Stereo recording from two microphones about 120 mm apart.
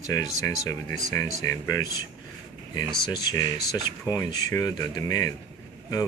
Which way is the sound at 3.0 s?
35° left (ahead or behind).